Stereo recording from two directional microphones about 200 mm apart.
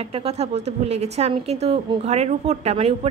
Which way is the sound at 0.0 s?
30° right (ahead or behind).